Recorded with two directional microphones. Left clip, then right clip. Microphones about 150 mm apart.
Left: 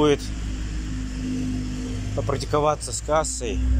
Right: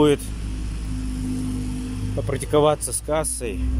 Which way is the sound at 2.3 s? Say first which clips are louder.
Right 3 dB; 25° right (ahead or behind).